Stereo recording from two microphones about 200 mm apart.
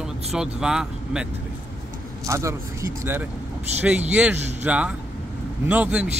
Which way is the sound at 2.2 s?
15° right (ahead or behind).